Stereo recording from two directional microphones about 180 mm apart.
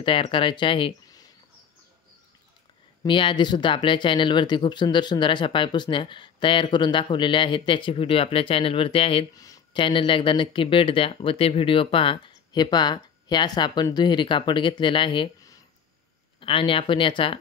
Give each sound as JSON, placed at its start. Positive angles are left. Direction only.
{"t": 0.0, "sound": "speech", "side_deg": 30}
{"t": 3.0, "sound": "speech", "side_deg": 25}
{"t": 9.3, "sound": "speech", "side_deg": 20}